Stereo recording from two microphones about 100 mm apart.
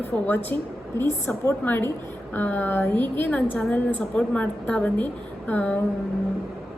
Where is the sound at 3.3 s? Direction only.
10° left (ahead or behind).